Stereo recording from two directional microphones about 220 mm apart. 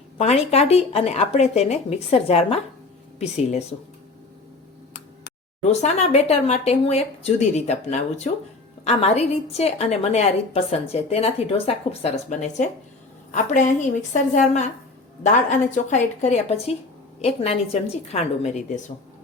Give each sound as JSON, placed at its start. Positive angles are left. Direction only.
{"t": 0.2, "sound": "a woman's voice", "side_deg": 30}
{"t": 5.8, "sound": "a woman's voice", "side_deg": 30}